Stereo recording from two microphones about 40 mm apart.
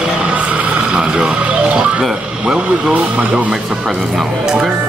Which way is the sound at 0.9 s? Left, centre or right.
Right.